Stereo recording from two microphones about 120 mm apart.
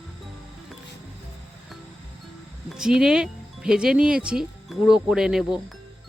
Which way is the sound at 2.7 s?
5° right (ahead or behind).